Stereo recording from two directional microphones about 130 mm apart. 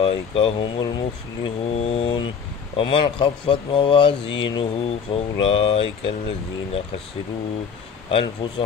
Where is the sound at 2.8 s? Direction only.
40° left (ahead or behind).